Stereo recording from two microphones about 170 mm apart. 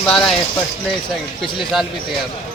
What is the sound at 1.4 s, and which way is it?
Speech, centre (ahead or behind).